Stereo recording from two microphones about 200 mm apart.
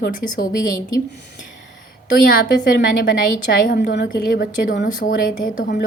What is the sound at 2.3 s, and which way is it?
Speech, 50° left (ahead or behind).